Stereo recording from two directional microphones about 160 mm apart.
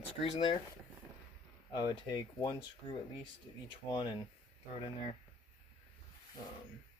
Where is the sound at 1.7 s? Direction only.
25° left (ahead or behind).